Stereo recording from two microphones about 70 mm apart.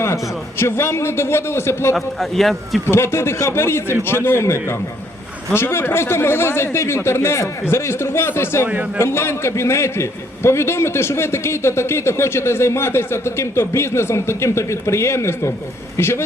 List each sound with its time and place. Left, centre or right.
0.6 s a man's voice: left
2.0 s a man's voice: centre
2.9 s a man's voice: left
8.6 s a man's voice: right
9.0 s a man's voice: left